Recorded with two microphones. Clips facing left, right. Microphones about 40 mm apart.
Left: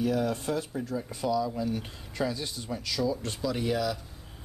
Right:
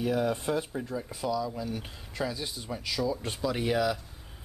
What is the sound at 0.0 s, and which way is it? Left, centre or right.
Speech, centre.